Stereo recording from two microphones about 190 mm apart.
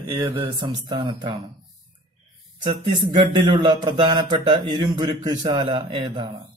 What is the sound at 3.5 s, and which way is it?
A man's voice, 25° right (ahead or behind).